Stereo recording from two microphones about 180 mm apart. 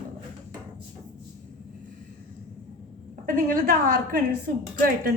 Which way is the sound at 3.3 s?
50° right (ahead or behind).